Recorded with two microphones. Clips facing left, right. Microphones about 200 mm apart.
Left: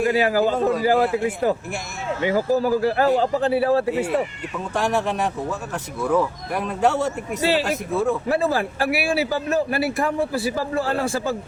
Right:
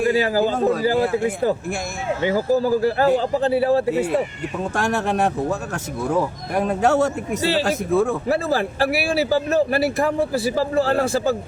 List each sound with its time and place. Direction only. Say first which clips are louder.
0.0 s speech: even; 30° right (ahead or behind)
2.2 s speech: right 1 dB; 30° right (ahead or behind)
4.7 s speech: left 1 dB; 45° right (ahead or behind)
7.4 s speech: even; 30° right (ahead or behind)
7.9 s speech: right 1 dB; 45° right (ahead or behind)